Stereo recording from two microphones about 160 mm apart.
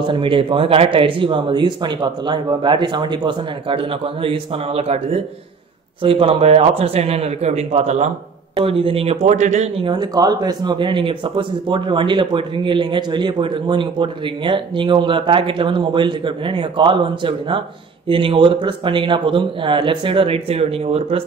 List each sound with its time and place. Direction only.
0.0 s speech: 30° right (ahead or behind)
9.8 s speech: 25° right (ahead or behind)